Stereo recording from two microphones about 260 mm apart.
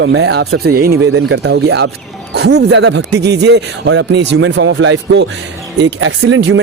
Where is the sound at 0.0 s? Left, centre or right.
Right.